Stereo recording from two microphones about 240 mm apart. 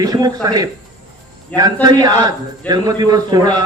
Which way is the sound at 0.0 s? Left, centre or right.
Centre.